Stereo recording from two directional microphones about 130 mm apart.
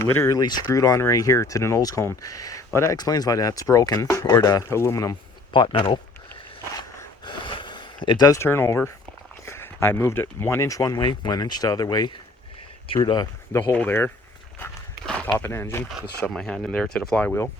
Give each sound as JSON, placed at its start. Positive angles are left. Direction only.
{"t": 0.0, "sound": "speech", "side_deg": 20}
{"t": 5.5, "sound": "speech", "side_deg": 40}
{"t": 7.3, "sound": "a sound", "side_deg": 40}
{"t": 9.5, "sound": "speech", "side_deg": 20}
{"t": 13.5, "sound": "speech", "side_deg": 20}
{"t": 15.0, "sound": "a sound", "side_deg": 5}
{"t": 15.4, "sound": "speech", "side_deg": 15}
{"t": 16.3, "sound": "speech", "side_deg": 5}